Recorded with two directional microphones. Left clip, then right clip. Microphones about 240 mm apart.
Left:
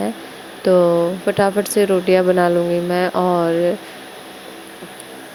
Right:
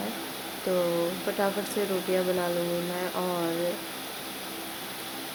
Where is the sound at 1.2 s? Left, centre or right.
Left.